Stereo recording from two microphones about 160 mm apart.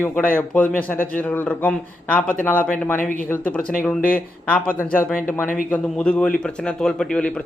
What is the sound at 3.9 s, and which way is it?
Speech, 60° left (ahead or behind).